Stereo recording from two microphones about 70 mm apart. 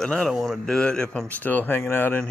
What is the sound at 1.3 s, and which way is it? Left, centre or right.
Speech, left.